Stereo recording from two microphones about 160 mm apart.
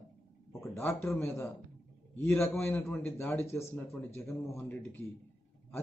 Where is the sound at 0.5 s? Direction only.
15° left (ahead or behind).